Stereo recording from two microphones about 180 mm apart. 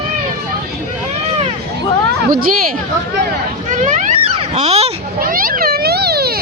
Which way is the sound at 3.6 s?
45° right (ahead or behind).